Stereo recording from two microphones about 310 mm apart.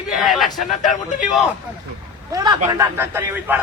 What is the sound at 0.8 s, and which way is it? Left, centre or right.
Speech, left.